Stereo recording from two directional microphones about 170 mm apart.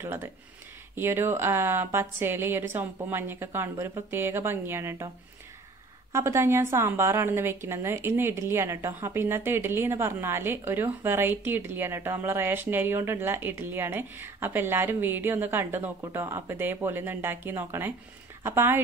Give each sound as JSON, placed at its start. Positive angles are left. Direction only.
{"t": 0.0, "sound": "a woman's voice", "side_deg": -15}
{"t": 6.1, "sound": "a woman's voice", "side_deg": -15}